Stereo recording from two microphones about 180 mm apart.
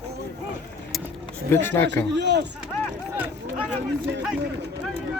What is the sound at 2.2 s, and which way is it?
Speech, 75° right (ahead or behind).